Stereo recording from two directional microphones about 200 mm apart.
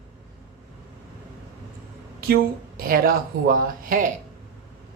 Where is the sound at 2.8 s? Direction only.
45° right (ahead or behind).